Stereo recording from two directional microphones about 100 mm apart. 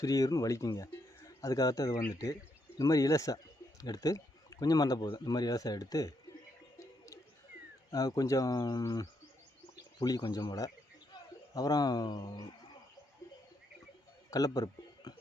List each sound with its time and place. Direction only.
0.0 s speech: 35° left (ahead or behind)
6.7 s a sound: 30° left (ahead or behind)
7.9 s speech: 40° left (ahead or behind)
14.3 s a man's voice: 40° left (ahead or behind)